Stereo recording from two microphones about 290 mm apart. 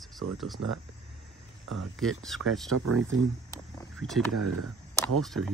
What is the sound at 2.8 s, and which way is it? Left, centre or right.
Speech, right.